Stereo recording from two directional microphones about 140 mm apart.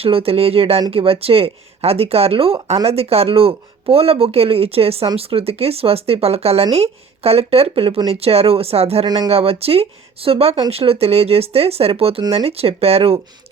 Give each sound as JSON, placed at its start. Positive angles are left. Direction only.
{"t": 0.0, "sound": "speech", "side_deg": -45}
{"t": 9.0, "sound": "speech", "side_deg": -30}
{"t": 9.3, "sound": "speech", "side_deg": -45}